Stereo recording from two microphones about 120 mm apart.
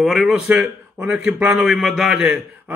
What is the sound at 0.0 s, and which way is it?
A man's voice, centre (ahead or behind).